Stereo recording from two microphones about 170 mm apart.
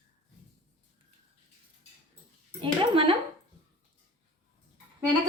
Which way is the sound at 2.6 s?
30° right (ahead or behind).